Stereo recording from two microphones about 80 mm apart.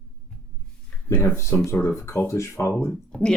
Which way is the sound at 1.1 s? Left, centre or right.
Left.